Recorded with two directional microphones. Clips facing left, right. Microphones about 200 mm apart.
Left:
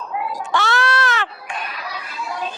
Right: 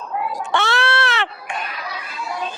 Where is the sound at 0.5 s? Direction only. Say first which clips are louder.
Even; 25° right (ahead or behind).